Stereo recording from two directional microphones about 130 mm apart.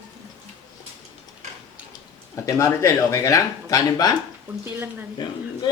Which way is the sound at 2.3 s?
25° left (ahead or behind).